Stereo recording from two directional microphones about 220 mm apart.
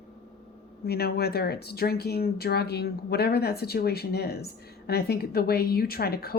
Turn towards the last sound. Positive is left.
turn(degrees=45)  # may be behind; listen again after turning